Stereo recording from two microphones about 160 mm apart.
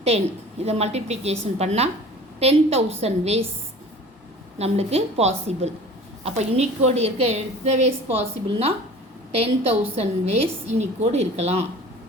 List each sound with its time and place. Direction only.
0.6 s a woman's voice: 40° right (ahead or behind)
4.5 s a woman's voice: 40° right (ahead or behind)